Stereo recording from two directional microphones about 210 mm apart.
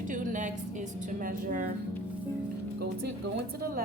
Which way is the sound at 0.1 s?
40° right (ahead or behind).